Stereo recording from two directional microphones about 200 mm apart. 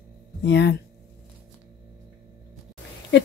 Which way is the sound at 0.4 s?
60° left (ahead or behind).